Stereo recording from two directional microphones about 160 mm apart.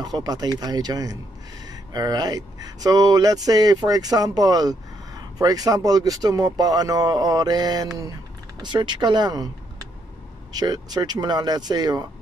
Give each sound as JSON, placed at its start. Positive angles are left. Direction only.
{"t": 0.0, "sound": "speech", "side_deg": -25}
{"t": 10.5, "sound": "speech", "side_deg": -25}